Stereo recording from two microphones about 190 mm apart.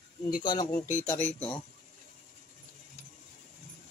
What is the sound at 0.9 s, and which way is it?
Speech, 10° left (ahead or behind).